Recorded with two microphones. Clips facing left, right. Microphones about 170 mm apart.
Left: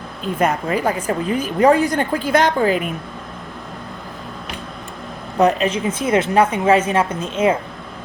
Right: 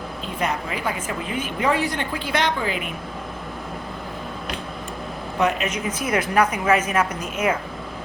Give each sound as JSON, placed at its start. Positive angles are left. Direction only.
{"t": 0.3, "sound": "a woman's voice", "side_deg": 45}
{"t": 5.4, "sound": "a woman's voice", "side_deg": 35}